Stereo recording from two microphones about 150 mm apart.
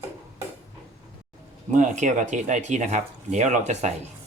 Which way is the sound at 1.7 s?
55° right (ahead or behind).